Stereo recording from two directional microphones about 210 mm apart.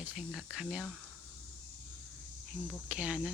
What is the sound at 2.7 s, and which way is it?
Speech, 5° right (ahead or behind).